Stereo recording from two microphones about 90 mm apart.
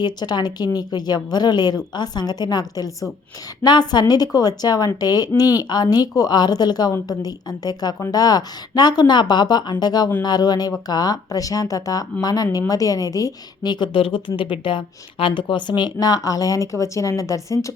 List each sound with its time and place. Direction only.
0.0 s a woman's voice: 50° left (ahead or behind)